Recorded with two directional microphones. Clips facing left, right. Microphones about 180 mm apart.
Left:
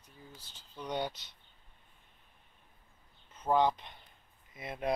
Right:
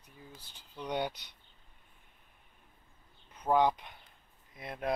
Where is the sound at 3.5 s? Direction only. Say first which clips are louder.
Right 1 dB; 10° right (ahead or behind).